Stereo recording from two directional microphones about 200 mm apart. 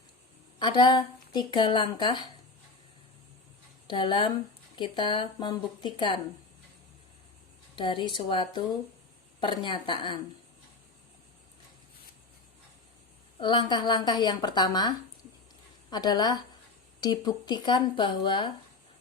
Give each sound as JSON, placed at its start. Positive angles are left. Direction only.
{"t": 0.6, "sound": "a woman's voice", "side_deg": 25}
{"t": 3.8, "sound": "a woman's voice", "side_deg": 25}
{"t": 7.8, "sound": "a woman's voice", "side_deg": 25}
{"t": 13.4, "sound": "a woman's voice", "side_deg": 25}